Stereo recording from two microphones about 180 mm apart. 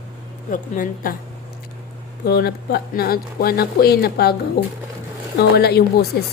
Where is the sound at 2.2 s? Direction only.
60° left (ahead or behind).